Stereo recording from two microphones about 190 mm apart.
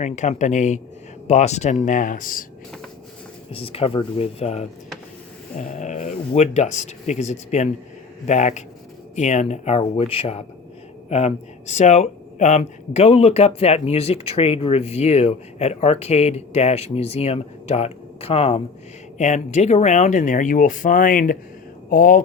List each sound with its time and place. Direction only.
0.0 s speech: 35° left (ahead or behind)
3.5 s speech: 30° left (ahead or behind); by 22.2 s 45° left (ahead or behind)